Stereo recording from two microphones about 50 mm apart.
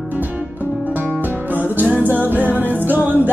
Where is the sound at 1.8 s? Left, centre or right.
Right.